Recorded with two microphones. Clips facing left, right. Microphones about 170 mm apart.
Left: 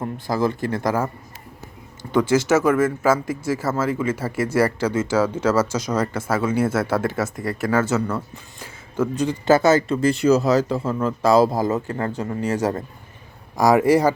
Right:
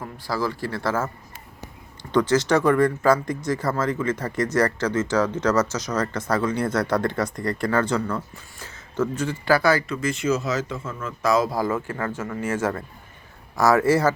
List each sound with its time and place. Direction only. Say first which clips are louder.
0.0 s speech: left 5 dB; 20° left (ahead or behind)
2.1 s speech: left 2 dB; 10° left (ahead or behind)
12.0 s speech: left 3 dB; 35° left (ahead or behind)
13.6 s speech: left 3 dB; 15° left (ahead or behind)